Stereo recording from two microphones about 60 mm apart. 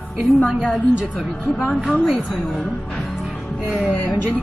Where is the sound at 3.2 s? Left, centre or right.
Centre.